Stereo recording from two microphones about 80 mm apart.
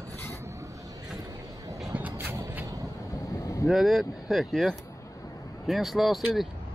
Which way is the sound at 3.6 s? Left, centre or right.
Centre.